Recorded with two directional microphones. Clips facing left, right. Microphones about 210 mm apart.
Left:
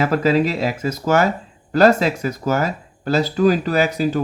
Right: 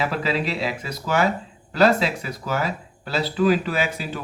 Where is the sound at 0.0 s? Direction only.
45° left (ahead or behind).